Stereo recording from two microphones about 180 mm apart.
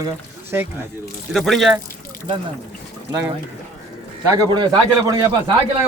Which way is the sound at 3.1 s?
15° right (ahead or behind).